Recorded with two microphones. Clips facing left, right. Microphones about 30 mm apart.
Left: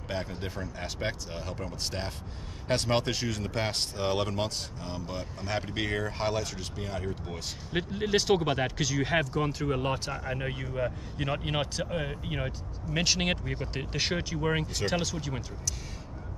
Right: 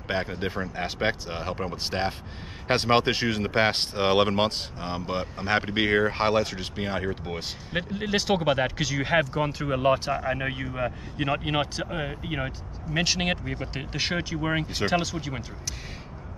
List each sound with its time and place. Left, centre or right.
0.1 s speech: right
7.7 s speech: centre